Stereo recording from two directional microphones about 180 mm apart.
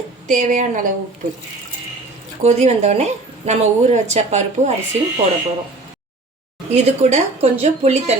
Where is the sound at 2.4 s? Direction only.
40° right (ahead or behind).